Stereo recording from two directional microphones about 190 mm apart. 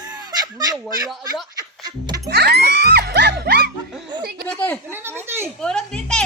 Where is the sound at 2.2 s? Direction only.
60° right (ahead or behind).